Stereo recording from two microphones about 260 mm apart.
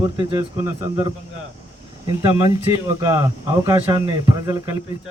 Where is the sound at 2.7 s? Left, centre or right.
Centre.